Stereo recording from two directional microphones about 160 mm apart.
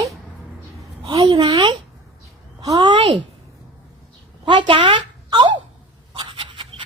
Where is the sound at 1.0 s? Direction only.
30° right (ahead or behind).